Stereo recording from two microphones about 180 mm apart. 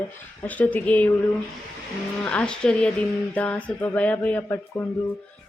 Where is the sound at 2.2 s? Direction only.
5° left (ahead or behind).